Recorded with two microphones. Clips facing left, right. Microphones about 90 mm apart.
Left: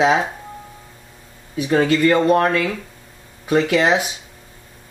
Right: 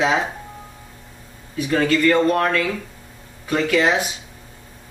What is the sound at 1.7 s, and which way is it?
Speech, 20° left (ahead or behind).